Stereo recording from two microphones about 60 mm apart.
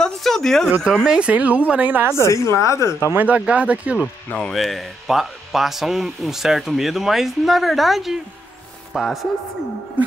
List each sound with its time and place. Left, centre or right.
0.0 s a sound: centre
1.0 s speech: centre
1.3 s speech: right
2.1 s a woman's voice: left
3.2 s speech: right
4.4 s speech: centre